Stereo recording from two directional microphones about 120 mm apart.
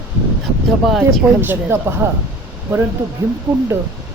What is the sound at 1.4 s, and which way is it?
Speech, 20° right (ahead or behind).